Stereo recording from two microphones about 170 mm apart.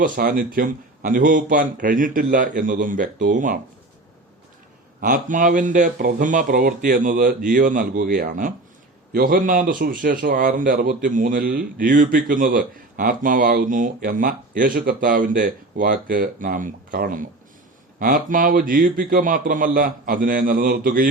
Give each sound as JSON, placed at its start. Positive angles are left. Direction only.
{"t": 0.0, "sound": "a man's voice", "side_deg": -55}
{"t": 4.9, "sound": "a man's voice", "side_deg": -55}